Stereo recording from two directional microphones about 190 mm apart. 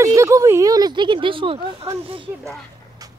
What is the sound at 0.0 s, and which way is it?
Speech, 15° right (ahead or behind).